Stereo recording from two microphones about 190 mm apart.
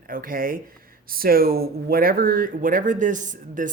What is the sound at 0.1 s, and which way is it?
Speech, 45° right (ahead or behind).